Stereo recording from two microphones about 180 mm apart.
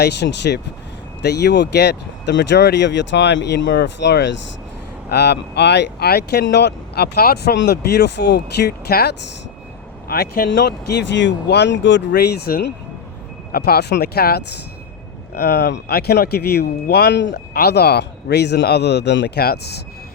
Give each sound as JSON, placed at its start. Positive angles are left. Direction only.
{"t": 0.0, "sound": "speech", "side_deg": 70}
{"t": 10.5, "sound": "speech", "side_deg": 70}